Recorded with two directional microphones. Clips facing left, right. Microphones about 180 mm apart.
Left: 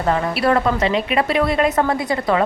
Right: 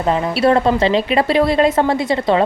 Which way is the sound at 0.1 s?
25° right (ahead or behind).